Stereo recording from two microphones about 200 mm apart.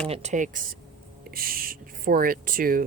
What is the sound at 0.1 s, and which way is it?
Speech, 35° right (ahead or behind).